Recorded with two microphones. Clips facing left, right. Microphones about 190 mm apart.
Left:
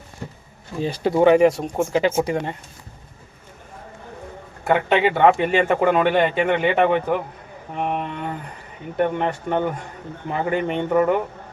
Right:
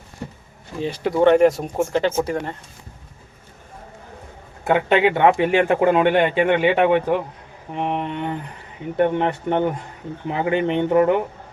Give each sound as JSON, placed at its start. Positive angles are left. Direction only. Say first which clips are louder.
{"t": 0.9, "sound": "speech", "louder": "left 1 dB", "side_deg": 35}
{"t": 1.2, "sound": "speech", "louder": "even", "side_deg": 5}
{"t": 4.7, "sound": "speech", "louder": "right 1 dB", "side_deg": -5}
{"t": 5.6, "sound": "speech", "louder": "right 1 dB", "side_deg": -15}